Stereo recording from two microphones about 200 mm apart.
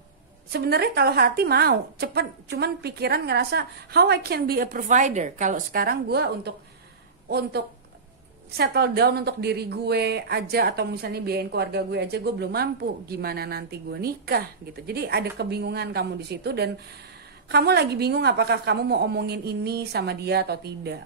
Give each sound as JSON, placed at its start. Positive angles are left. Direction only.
{"t": 0.5, "sound": "a woman's voice", "side_deg": -55}